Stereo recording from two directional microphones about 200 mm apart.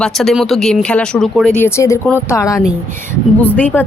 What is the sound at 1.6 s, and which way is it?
A woman's voice, 15° left (ahead or behind).